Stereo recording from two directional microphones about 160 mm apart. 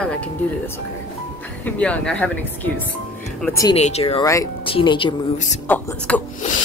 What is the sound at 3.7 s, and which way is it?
Speech, 40° left (ahead or behind).